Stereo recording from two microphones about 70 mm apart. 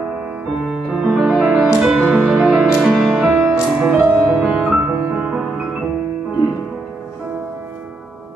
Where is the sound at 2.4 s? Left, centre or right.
Centre.